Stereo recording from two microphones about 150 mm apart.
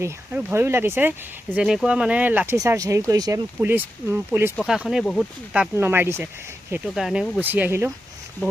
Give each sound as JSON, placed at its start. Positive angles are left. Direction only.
{"t": 0.0, "sound": "speech", "side_deg": -15}
{"t": 2.6, "sound": "speech", "side_deg": -20}
{"t": 4.5, "sound": "speech", "side_deg": 0}
{"t": 5.5, "sound": "speech", "side_deg": -15}